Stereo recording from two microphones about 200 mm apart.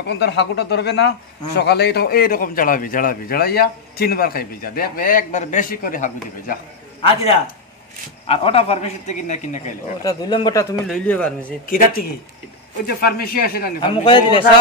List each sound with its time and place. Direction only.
0.2 s a man's voice: 60° left (ahead or behind); by 6.6 s 40° left (ahead or behind)
7.0 s a man's voice: 30° left (ahead or behind)
10.0 s a man's voice: 20° left (ahead or behind)
10.9 s speech: 5° left (ahead or behind)
11.6 s a man's voice: 45° left (ahead or behind)
13.7 s a man's voice: 25° left (ahead or behind)